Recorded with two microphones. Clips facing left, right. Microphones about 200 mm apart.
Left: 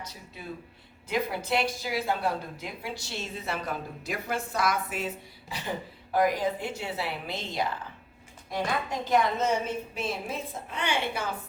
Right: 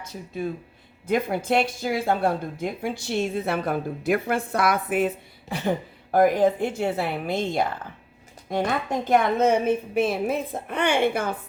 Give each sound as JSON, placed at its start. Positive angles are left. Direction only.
{"t": 1.0, "sound": "a woman's voice", "side_deg": -50}